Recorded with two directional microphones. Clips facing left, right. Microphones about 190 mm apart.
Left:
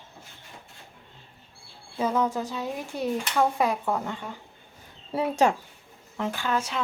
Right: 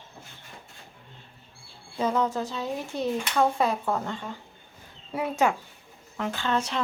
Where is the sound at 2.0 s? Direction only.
10° left (ahead or behind).